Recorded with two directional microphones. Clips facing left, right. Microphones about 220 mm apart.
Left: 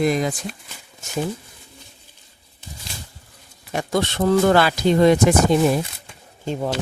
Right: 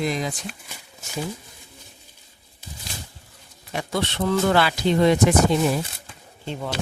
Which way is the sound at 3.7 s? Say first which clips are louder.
Left 4 dB; 45° left (ahead or behind).